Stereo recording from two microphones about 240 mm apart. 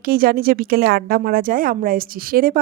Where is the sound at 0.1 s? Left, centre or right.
Right.